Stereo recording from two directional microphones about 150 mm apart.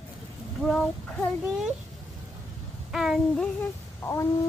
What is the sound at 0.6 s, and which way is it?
Speech, 5° left (ahead or behind).